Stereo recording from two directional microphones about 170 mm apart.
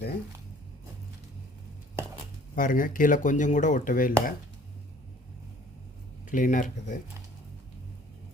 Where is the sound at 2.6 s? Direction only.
55° left (ahead or behind).